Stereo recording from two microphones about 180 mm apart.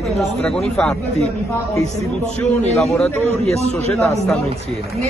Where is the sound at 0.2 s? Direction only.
Centre (ahead or behind).